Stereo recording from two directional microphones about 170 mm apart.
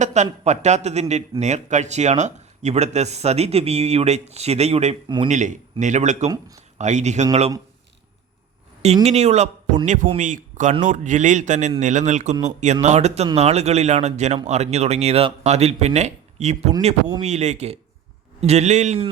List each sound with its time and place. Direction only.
0.0 s speech: 45° right (ahead or behind)
5.0 s a man's voice: 25° right (ahead or behind)
5.3 s speech: 45° right (ahead or behind)
9.0 s speech: 40° right (ahead or behind)